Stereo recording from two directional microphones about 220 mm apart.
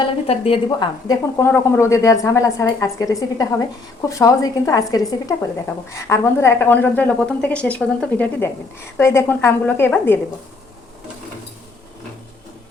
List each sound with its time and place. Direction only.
0.0 s speech: 25° left (ahead or behind); by 10.2 s 10° left (ahead or behind)